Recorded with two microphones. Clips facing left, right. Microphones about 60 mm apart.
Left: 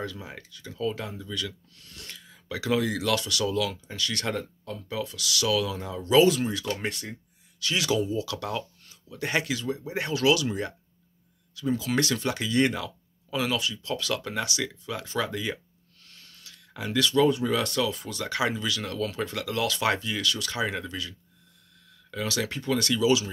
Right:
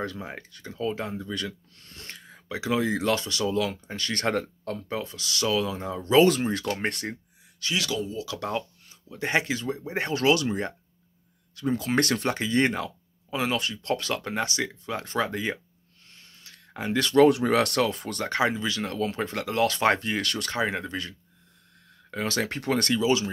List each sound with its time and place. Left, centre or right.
0.0 s speech: right
2.4 s speech: right
7.6 s speech: right
8.0 s speech: centre
8.4 s speech: right
12.4 s speech: right
13.6 s speech: right
16.1 s a sound: right
17.1 s speech: right
17.9 s speech: right
20.6 s speech: right
21.8 s a sound: right
22.6 s speech: right
22.9 s speech: right